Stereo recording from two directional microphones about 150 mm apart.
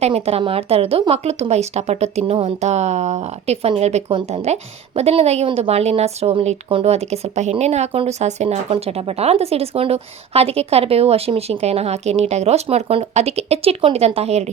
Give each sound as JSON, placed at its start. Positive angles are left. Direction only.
{"t": 0.0, "sound": "speech", "side_deg": -45}